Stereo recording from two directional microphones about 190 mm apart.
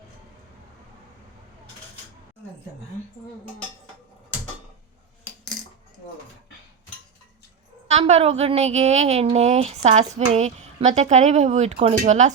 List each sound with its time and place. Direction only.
7.9 s a woman's voice: 35° right (ahead or behind)